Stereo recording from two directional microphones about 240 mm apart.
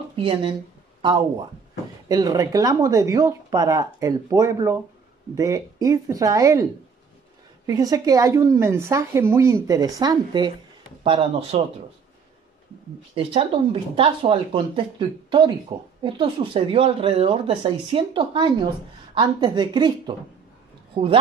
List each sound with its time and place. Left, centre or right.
0.1 s a sound: right
2.0 s a woman's voice: centre
13.1 s speech: right